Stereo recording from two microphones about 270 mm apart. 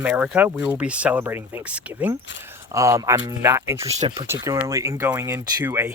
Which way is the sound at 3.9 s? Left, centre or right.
Right.